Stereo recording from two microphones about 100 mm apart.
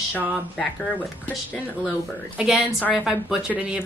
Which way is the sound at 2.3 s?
5° right (ahead or behind).